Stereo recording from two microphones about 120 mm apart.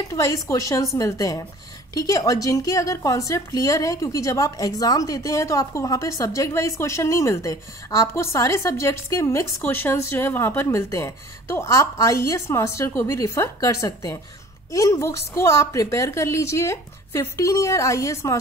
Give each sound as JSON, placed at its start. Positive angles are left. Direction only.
{"t": 0.1, "sound": "a woman's voice", "side_deg": 25}